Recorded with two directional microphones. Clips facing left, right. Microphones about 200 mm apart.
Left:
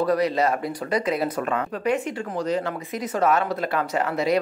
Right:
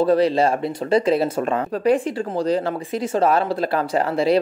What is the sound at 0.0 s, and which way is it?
Speech, 30° right (ahead or behind).